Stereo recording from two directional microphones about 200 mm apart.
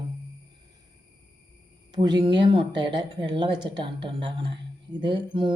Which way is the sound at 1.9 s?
20° right (ahead or behind).